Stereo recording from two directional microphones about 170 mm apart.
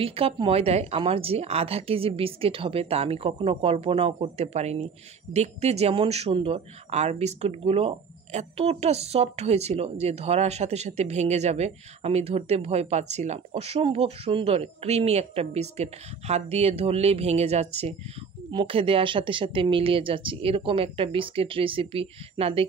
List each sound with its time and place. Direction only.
0.0 s speech: 35° right (ahead or behind)